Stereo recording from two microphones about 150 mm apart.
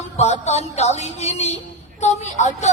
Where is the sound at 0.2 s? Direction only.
45° left (ahead or behind).